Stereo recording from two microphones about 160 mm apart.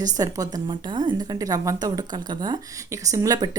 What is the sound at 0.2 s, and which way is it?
A woman's voice, 25° right (ahead or behind).